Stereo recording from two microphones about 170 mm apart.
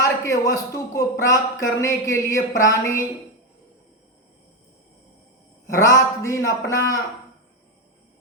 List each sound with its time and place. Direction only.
0.0 s a man's voice: 20° left (ahead or behind)
1.3 s a sound: 20° left (ahead or behind)
2.6 s a man's voice: 20° left (ahead or behind)
5.6 s a man's voice: 20° left (ahead or behind)